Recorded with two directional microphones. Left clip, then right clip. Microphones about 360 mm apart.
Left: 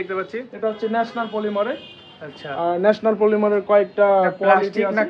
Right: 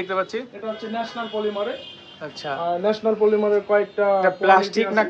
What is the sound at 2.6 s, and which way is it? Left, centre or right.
Speech, left.